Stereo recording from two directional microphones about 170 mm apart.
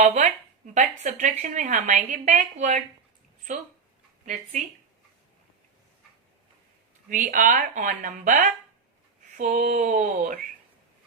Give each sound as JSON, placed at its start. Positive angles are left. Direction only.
{"t": 0.0, "sound": "speech", "side_deg": -45}
{"t": 7.1, "sound": "speech", "side_deg": -50}